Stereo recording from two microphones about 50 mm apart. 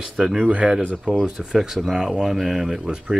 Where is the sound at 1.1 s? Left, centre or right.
Right.